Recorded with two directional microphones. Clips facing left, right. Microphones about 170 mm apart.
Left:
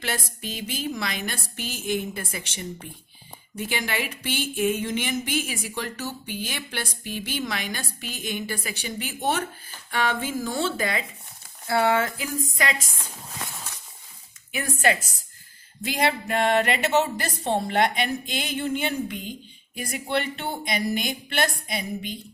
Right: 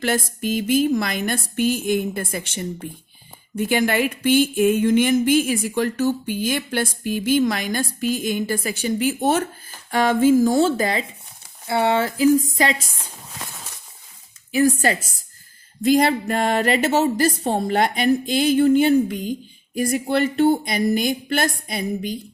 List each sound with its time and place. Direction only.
0.0 s a woman's voice: 45° right (ahead or behind)
11.7 s a woman's voice: 25° right (ahead or behind)
14.5 s a woman's voice: 35° right (ahead or behind)